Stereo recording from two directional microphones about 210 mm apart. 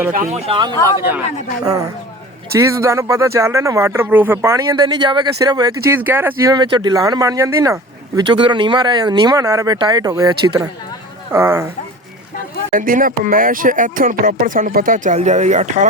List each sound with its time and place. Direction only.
0.1 s speech: 35° right (ahead or behind)
1.6 s speech: 15° right (ahead or behind)
12.7 s speech: 40° right (ahead or behind)